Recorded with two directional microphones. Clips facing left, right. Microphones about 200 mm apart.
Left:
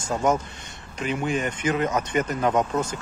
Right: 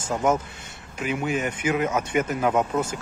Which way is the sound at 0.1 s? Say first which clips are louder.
Even; 5° right (ahead or behind).